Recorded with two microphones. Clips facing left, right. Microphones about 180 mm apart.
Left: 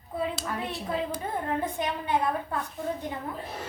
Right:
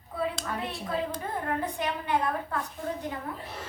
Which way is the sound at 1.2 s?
20° left (ahead or behind).